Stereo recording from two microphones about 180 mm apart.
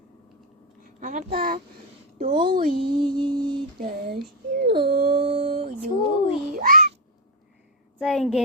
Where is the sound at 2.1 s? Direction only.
35° right (ahead or behind).